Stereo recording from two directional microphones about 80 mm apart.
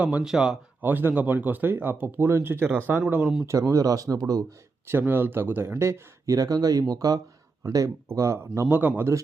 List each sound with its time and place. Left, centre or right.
0.0 s speech: centre
0.3 s speech: centre
0.8 s speech: right
3.4 s speech: right
4.9 s speech: right
8.7 s speech: right